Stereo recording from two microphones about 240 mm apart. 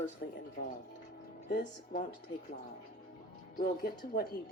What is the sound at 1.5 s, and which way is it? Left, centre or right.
Speech, left.